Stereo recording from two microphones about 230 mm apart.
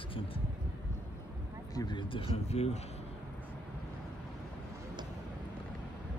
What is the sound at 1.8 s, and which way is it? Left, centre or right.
Speech, centre.